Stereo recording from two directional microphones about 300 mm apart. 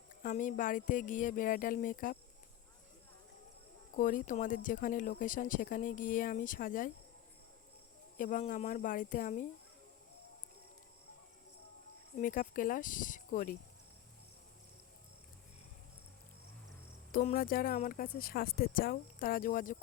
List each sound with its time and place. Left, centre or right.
0.1 s speech: left
3.9 s speech: left
8.2 s speech: left
12.1 s speech: left
17.1 s speech: left